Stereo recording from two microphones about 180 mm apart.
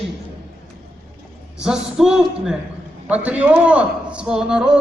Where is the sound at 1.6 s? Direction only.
5° right (ahead or behind).